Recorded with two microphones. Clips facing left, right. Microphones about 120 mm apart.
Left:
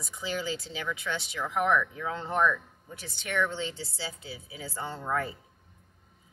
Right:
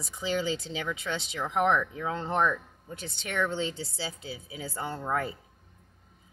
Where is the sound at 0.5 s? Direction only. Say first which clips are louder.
Right 2 dB; 20° right (ahead or behind).